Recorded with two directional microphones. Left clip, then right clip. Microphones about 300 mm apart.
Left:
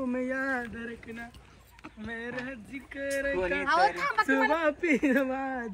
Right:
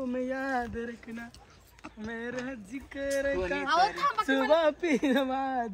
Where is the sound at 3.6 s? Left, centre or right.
Centre.